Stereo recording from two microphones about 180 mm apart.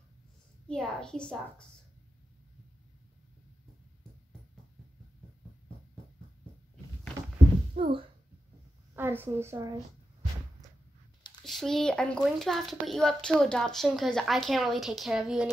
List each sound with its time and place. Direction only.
0.7 s a child's voice: 5° left (ahead or behind)
7.8 s speech: 35° right (ahead or behind)
8.9 s a woman's voice: 10° right (ahead or behind)
11.4 s a child's voice: centre (ahead or behind)